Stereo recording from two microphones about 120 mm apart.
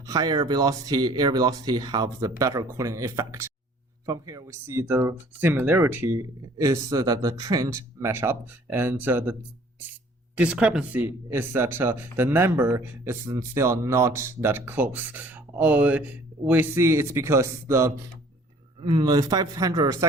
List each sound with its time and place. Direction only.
0.0 s speech: 30° right (ahead or behind)
6.6 s speech: 30° right (ahead or behind)
10.3 s speech: 10° right (ahead or behind)
18.8 s speech: 40° right (ahead or behind)